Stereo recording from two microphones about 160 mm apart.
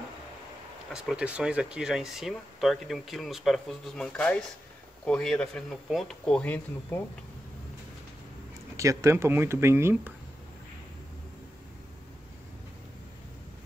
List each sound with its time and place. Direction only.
0.9 s speech: 5° right (ahead or behind); by 7.0 s 10° left (ahead or behind)
8.7 s speech: 20° right (ahead or behind)